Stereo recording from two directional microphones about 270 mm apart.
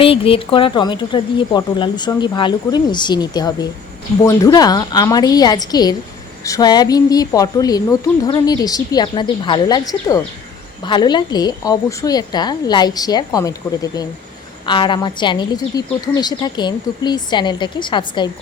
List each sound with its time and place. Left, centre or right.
0.0 s a woman's voice: centre